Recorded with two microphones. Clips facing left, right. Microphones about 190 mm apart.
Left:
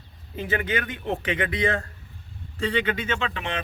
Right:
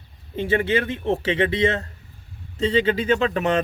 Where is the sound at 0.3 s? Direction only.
30° right (ahead or behind).